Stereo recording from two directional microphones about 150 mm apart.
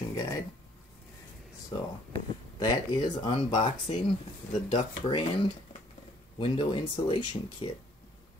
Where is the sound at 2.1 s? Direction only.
30° left (ahead or behind).